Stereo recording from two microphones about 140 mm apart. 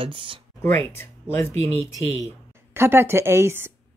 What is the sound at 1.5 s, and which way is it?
Speech, 45° right (ahead or behind).